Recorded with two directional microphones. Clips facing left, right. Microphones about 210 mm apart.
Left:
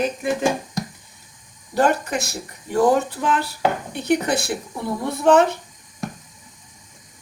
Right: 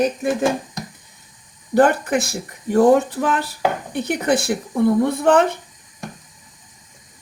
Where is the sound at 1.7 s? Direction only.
55° right (ahead or behind).